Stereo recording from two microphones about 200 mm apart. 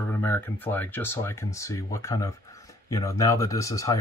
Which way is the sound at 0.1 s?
10° left (ahead or behind).